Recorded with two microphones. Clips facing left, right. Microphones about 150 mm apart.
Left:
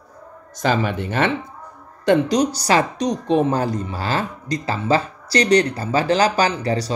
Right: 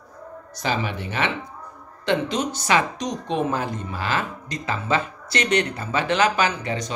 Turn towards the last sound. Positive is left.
turn(degrees=35)  # may be behind; listen again after turning